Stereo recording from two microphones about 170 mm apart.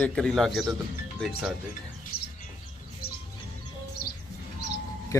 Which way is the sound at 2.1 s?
70° left (ahead or behind).